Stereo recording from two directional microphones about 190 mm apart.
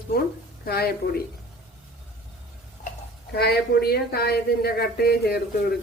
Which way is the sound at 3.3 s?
55° left (ahead or behind).